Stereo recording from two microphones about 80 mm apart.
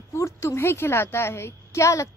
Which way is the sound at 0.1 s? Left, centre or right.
Left.